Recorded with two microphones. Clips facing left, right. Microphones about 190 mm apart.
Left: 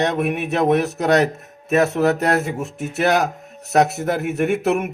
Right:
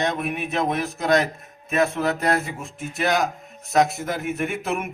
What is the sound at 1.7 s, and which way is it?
Music, 40° left (ahead or behind).